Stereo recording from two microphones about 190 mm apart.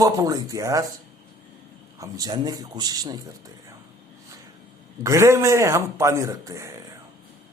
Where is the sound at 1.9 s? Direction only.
20° right (ahead or behind).